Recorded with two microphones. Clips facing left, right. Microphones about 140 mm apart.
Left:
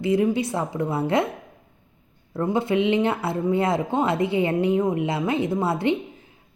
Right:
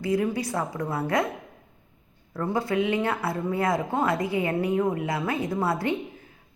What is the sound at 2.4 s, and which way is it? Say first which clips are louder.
A woman's voice: left 4 dB; 20° left (ahead or behind).